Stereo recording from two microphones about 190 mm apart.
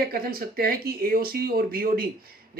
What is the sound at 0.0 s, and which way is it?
Speech, 50° right (ahead or behind).